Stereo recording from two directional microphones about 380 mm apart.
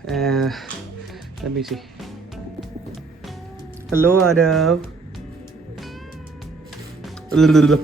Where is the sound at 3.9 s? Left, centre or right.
Centre.